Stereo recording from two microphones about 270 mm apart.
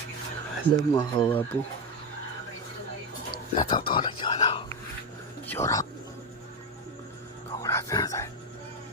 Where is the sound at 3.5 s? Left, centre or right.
Centre.